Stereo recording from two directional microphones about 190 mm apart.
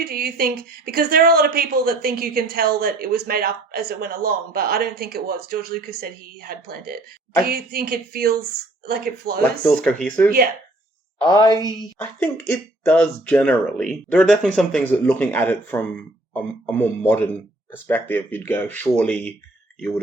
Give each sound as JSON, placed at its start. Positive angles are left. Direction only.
{"t": 0.0, "sound": "a woman's voice", "side_deg": -55}
{"t": 9.4, "sound": "speech", "side_deg": 5}
{"t": 10.2, "sound": "a woman's voice", "side_deg": -50}
{"t": 11.2, "sound": "a woman's voice", "side_deg": 20}
{"t": 11.9, "sound": "speech", "side_deg": 10}